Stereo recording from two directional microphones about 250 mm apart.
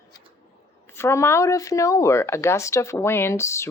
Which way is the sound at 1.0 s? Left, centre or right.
Centre.